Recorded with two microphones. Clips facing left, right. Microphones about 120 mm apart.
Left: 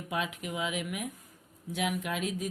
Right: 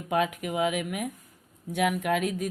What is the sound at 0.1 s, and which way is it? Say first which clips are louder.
Speech: right 8 dB; 55° right (ahead or behind).